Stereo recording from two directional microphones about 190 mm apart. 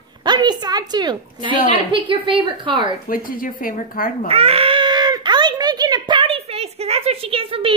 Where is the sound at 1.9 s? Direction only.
30° right (ahead or behind).